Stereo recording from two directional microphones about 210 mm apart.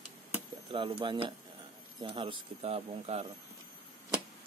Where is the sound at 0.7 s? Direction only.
25° right (ahead or behind).